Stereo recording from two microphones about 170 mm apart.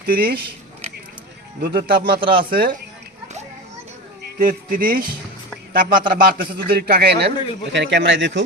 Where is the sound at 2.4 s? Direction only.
55° right (ahead or behind).